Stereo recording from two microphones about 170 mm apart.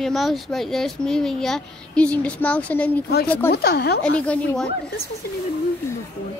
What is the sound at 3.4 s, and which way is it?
Speech, 70° left (ahead or behind).